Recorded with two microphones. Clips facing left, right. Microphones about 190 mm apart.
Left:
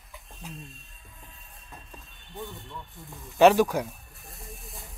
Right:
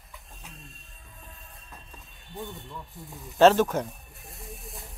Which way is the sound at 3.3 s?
15° left (ahead or behind).